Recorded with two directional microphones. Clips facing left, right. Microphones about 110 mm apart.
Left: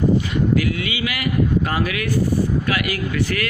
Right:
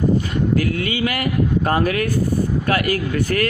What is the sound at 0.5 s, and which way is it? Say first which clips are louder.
Speech: right 1 dB; 40° right (ahead or behind).